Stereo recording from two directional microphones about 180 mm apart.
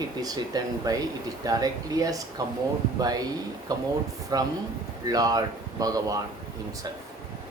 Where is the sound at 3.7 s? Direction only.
20° right (ahead or behind).